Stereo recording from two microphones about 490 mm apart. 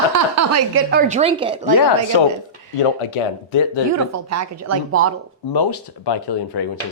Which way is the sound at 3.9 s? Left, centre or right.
Right.